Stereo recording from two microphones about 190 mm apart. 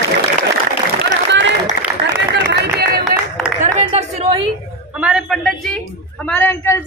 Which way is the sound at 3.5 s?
35° right (ahead or behind).